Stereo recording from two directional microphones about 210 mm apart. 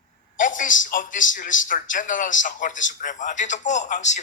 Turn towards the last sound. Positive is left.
turn(degrees=35)  # may be behind; listen again after turning